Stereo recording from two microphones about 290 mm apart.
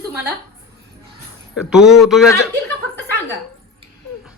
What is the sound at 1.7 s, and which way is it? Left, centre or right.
Speech, centre.